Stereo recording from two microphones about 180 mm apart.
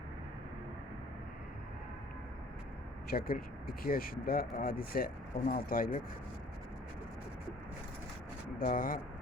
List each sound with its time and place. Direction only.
3.1 s speech: 55° left (ahead or behind)
8.5 s speech: 50° left (ahead or behind)